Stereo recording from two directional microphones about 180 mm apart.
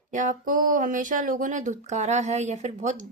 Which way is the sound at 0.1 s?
45° right (ahead or behind).